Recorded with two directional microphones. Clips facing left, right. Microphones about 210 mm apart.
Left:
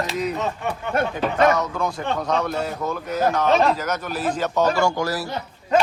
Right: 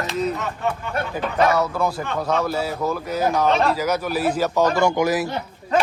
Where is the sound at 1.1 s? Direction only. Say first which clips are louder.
Right 1 dB; 5° right (ahead or behind).